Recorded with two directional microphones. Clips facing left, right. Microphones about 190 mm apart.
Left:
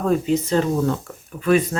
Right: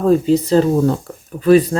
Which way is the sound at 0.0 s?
35° right (ahead or behind).